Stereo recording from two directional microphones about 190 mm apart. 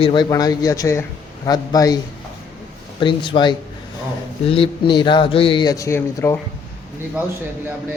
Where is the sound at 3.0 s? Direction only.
25° left (ahead or behind).